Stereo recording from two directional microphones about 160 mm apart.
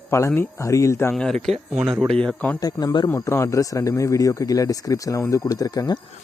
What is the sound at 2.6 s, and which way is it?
Speech, 25° left (ahead or behind).